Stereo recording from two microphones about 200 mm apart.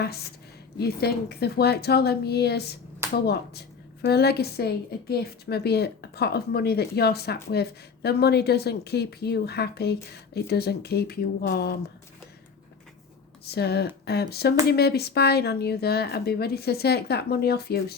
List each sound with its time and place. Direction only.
0.0 s a woman's voice: 50° left (ahead or behind)
13.4 s a woman's voice: 55° left (ahead or behind)